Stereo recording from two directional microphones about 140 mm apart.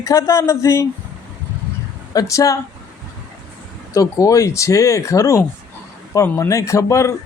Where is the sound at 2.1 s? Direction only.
25° left (ahead or behind).